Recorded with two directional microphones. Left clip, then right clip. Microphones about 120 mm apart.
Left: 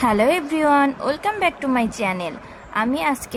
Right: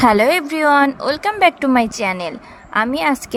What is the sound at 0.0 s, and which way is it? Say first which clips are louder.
A woman's voice: right 5 dB; 70° right (ahead or behind).